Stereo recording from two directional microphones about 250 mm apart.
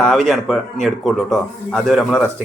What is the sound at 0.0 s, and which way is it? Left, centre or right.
A man's voice, centre.